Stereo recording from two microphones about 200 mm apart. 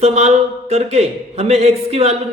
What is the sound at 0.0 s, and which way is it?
A man's voice, 30° right (ahead or behind).